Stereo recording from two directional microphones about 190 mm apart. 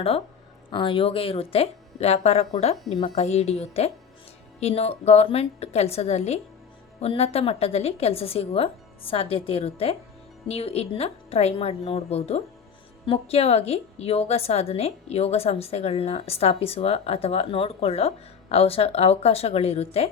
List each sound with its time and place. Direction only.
0.7 s a woman's voice: 25° left (ahead or behind)